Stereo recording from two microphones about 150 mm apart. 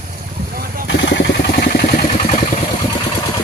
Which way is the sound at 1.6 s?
90° left.